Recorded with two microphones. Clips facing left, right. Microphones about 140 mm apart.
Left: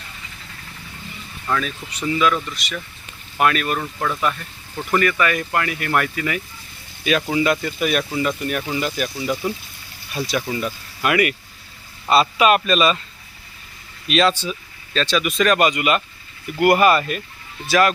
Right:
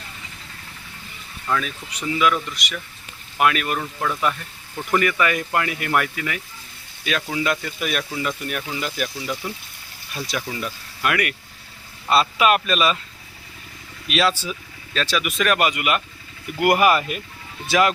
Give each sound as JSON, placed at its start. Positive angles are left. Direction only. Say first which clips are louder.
{"t": 1.6, "sound": "speech", "louder": "left 3 dB", "side_deg": -10}
{"t": 4.9, "sound": "speech", "louder": "left 1 dB", "side_deg": -15}
{"t": 5.9, "sound": "speech", "louder": "left 2 dB", "side_deg": -5}
{"t": 14.1, "sound": "speech", "louder": "left 3 dB", "side_deg": -5}